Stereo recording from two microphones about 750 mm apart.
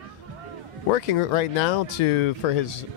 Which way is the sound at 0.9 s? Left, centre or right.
Left.